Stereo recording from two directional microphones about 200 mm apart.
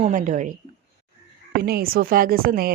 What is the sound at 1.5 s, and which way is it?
A woman's voice, 50° right (ahead or behind).